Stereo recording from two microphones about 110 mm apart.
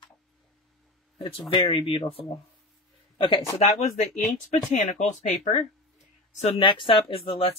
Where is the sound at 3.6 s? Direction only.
85° left.